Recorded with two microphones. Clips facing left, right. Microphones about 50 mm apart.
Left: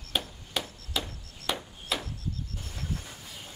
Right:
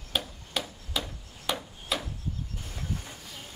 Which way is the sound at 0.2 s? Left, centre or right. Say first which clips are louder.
Even; centre.